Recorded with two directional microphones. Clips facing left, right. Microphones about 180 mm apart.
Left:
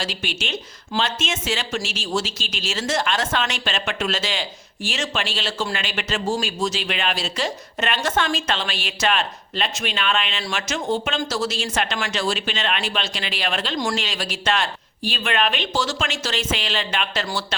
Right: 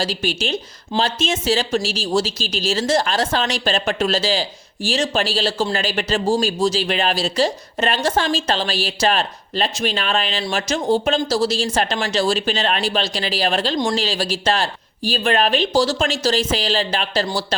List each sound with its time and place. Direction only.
0.0 s speech: 35° right (ahead or behind)